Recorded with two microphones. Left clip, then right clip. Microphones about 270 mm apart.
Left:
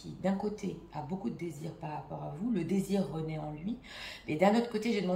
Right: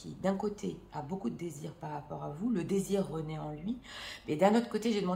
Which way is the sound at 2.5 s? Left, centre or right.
Centre.